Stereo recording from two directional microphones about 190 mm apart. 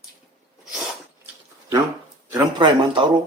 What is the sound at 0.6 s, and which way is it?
Sneeze, centre (ahead or behind).